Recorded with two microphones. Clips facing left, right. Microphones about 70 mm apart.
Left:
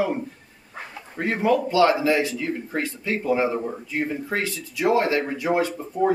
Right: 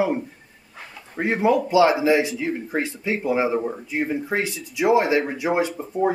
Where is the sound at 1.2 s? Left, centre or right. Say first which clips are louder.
Right 2 dB; centre.